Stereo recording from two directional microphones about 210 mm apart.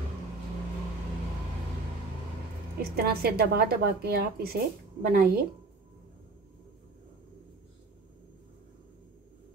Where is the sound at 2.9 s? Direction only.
45° right (ahead or behind).